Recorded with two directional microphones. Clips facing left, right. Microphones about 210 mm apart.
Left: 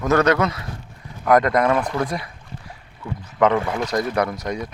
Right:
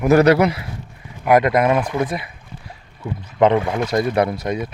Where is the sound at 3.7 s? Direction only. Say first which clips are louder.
Right 3 dB; 15° right (ahead or behind).